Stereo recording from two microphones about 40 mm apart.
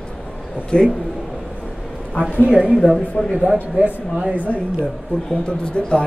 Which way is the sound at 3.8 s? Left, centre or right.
Right.